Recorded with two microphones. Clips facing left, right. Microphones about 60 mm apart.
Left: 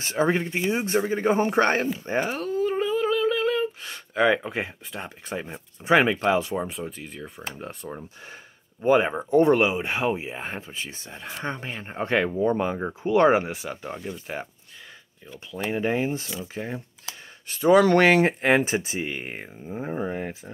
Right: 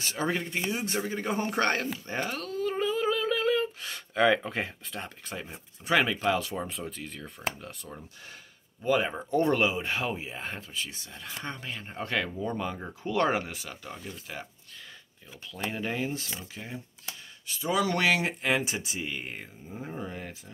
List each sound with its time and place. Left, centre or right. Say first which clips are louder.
0.0 s speech: left 7 dB; left
2.7 s a sound: left 1 dB; centre
5.3 s speech: left 7 dB; left
7.5 s speech: left 7 dB; left
15.5 s speech: left 7 dB; left
16.5 s speech: left 8 dB; left